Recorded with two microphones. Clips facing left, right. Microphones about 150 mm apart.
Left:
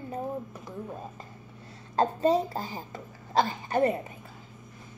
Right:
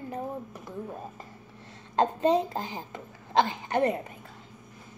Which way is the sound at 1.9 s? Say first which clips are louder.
Even; 20° right (ahead or behind).